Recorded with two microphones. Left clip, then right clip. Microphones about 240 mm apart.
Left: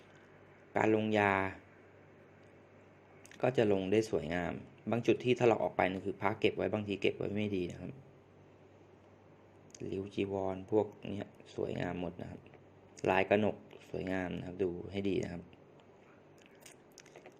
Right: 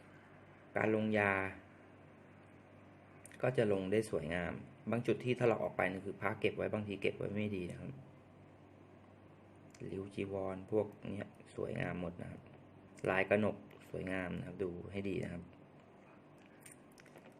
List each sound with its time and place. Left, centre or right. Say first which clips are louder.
0.7 s speech: left 4 dB; centre
3.3 s speech: left 4 dB; centre
9.7 s speech: left 5 dB; centre